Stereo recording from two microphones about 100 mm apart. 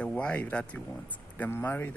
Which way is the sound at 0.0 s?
10° left (ahead or behind).